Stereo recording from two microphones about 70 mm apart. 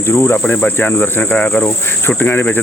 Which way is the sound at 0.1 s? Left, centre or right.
Left.